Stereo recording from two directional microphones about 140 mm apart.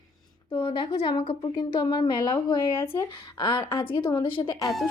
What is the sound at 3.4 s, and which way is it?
A woman's voice, 40° left (ahead or behind).